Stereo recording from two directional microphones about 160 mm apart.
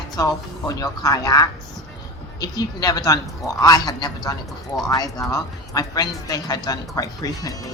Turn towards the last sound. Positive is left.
turn(degrees=20)  # may be behind; listen again after turning